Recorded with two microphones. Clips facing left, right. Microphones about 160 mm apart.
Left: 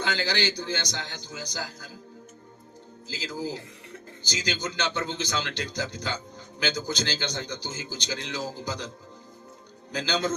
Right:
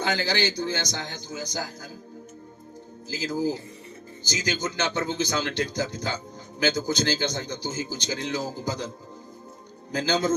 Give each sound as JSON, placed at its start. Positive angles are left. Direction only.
{"t": 0.0, "sound": "a man's voice", "side_deg": -45}
{"t": 3.1, "sound": "a man's voice", "side_deg": -45}
{"t": 9.9, "sound": "a man's voice", "side_deg": -50}